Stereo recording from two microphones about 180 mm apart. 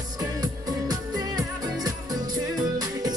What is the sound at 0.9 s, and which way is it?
Music, 20° right (ahead or behind).